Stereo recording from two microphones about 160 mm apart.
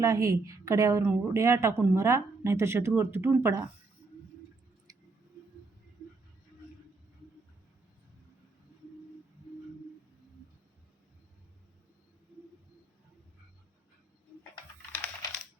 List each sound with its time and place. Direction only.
0.0 s a woman's voice: 20° right (ahead or behind)
14.8 s typing: 10° left (ahead or behind)